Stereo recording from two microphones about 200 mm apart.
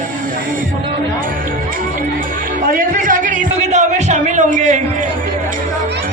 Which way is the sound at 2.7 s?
45° right (ahead or behind).